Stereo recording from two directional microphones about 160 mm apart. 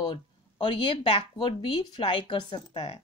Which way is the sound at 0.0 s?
30° left (ahead or behind).